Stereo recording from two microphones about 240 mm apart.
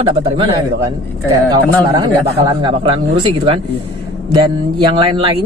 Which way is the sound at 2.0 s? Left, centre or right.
Centre.